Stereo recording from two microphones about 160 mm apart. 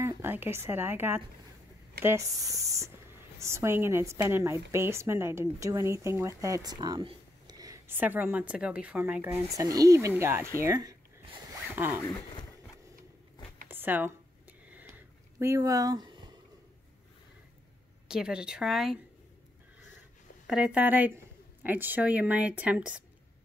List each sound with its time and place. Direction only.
0.0 s a woman's voice: 15° right (ahead or behind)
13.7 s a sound: 10° right (ahead or behind)
15.3 s speech: 15° right (ahead or behind)
18.0 s a woman's voice: 5° right (ahead or behind)
20.4 s a woman's voice: 5° right (ahead or behind)